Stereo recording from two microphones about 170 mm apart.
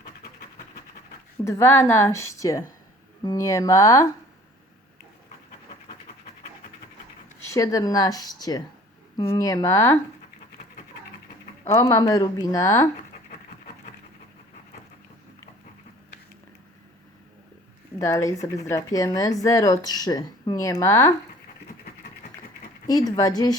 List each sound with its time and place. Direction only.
1.5 s a woman's voice: 15° left (ahead or behind)
7.4 s speech: 20° left (ahead or behind)
11.7 s speech: 20° left (ahead or behind)
18.0 s a woman's voice: 20° left (ahead or behind)
22.9 s speech: 20° left (ahead or behind)